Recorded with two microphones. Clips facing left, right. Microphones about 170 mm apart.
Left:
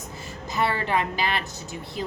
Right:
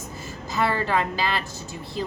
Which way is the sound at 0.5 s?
20° left (ahead or behind).